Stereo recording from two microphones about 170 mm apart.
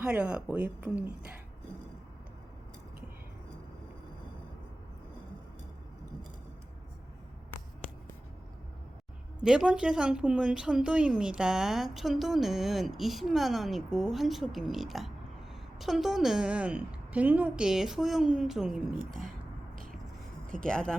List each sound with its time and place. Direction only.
0.0 s a woman's voice: 5° right (ahead or behind)
9.4 s speech: 5° right (ahead or behind)
19.7 s a sound: 55° right (ahead or behind)
20.7 s speech: 5° left (ahead or behind)